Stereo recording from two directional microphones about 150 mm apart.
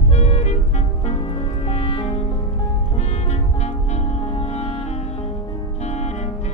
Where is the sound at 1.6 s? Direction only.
40° left (ahead or behind).